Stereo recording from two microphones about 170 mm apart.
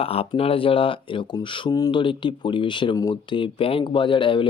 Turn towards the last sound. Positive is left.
turn(degrees=30)  # may be behind; listen again after turning